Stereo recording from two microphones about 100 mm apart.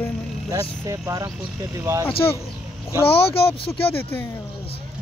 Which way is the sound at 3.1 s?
70° left (ahead or behind).